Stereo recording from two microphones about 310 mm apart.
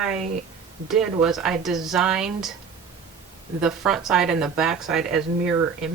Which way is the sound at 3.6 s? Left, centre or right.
Centre.